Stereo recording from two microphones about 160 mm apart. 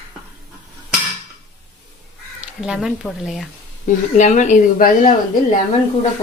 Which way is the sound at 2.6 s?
5° right (ahead or behind).